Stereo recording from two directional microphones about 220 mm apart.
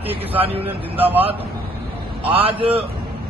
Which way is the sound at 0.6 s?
10° right (ahead or behind).